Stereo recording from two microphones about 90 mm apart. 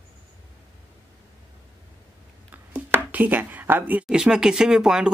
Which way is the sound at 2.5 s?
20° right (ahead or behind).